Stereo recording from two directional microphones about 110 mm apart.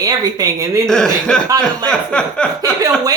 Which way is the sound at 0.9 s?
5° left (ahead or behind).